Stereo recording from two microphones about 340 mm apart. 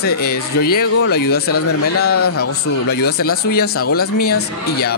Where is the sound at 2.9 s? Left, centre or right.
Left.